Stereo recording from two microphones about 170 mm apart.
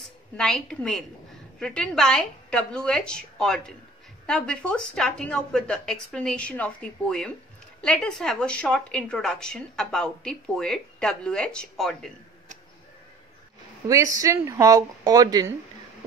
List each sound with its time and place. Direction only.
0.4 s a woman's voice: 5° left (ahead or behind)
13.8 s speech: 20° right (ahead or behind)